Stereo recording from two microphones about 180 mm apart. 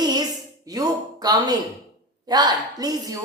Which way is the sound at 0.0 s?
20° right (ahead or behind).